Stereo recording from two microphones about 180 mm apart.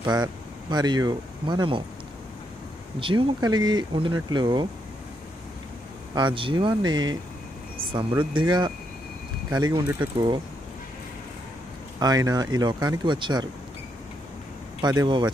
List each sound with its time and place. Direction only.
0.0 s speech: 20° right (ahead or behind)
3.0 s speech: 30° right (ahead or behind)
6.1 s speech: 25° right (ahead or behind)
8.2 s speech: 25° right (ahead or behind)
12.0 s speech: 20° right (ahead or behind)
14.8 s speech: 25° right (ahead or behind)